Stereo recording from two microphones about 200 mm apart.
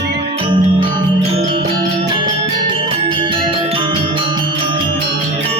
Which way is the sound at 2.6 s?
25° right (ahead or behind).